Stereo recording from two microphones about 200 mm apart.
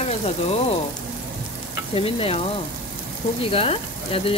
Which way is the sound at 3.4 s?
30° left (ahead or behind).